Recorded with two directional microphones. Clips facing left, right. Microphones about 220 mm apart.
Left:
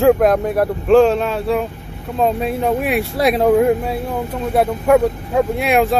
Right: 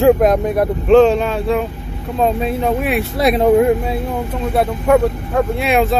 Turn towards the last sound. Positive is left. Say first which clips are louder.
# even
turn(degrees=10)  # may be behind; listen again after turning